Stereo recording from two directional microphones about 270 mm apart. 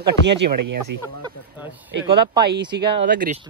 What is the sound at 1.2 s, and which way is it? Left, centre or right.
Snake, centre.